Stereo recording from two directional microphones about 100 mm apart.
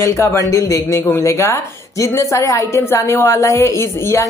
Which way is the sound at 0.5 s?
30° left (ahead or behind).